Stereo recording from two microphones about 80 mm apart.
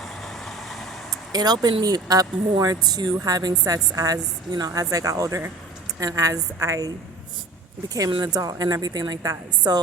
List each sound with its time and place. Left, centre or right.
0.0 s vehicle: centre
1.3 s a woman's voice: right
8.2 s a woman's voice: right